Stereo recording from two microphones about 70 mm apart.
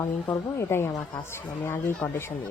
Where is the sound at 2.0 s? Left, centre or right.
Centre.